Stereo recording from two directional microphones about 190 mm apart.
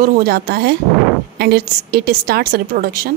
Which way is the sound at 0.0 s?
50° right (ahead or behind).